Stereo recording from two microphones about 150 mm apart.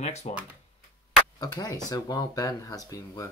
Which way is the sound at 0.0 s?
45° left (ahead or behind).